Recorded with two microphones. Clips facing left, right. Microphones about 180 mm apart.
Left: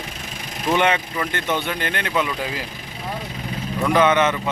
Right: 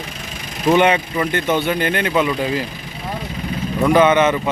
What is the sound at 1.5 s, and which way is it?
Speech, 5° right (ahead or behind).